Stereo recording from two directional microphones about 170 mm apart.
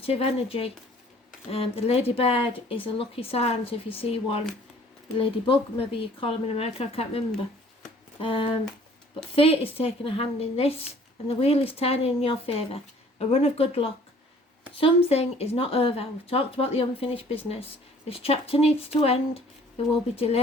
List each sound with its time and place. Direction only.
0.0 s speech: 35° left (ahead or behind)
5.1 s speech: 30° left (ahead or behind)